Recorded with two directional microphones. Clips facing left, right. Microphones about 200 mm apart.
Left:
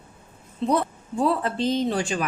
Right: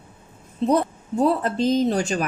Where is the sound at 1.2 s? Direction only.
40° right (ahead or behind).